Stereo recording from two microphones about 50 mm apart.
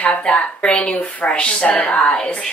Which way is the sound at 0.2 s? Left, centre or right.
Left.